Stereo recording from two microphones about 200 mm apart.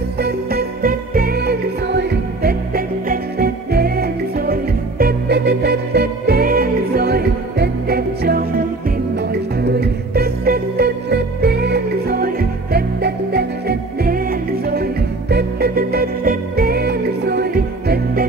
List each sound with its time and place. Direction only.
0.2 s music: 50° right (ahead or behind)